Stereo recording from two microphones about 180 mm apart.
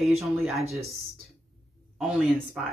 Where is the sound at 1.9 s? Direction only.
Centre (ahead or behind).